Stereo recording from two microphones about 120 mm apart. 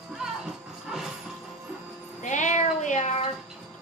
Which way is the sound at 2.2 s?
90° left.